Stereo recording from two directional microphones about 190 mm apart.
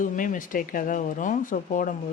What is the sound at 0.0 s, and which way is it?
Speech, 45° left (ahead or behind).